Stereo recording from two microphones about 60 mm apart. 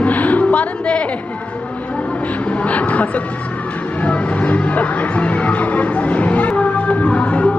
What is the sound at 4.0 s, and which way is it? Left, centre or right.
Music, left.